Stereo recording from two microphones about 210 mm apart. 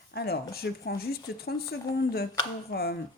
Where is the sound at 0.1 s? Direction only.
50° left (ahead or behind).